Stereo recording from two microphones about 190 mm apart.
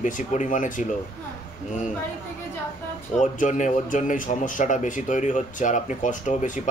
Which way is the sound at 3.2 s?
40° left (ahead or behind).